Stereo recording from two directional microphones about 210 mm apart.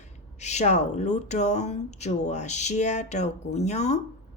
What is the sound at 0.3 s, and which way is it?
Speech, 35° left (ahead or behind).